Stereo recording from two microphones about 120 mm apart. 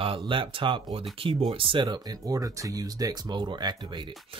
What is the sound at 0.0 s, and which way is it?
Speech, 50° right (ahead or behind).